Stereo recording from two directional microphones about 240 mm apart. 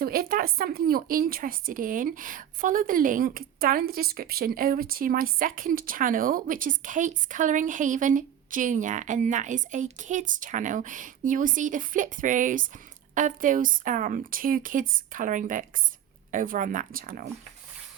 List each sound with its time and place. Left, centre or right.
0.0 s a woman's voice: right